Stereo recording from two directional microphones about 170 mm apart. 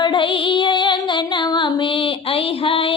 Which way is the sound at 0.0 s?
30° left (ahead or behind).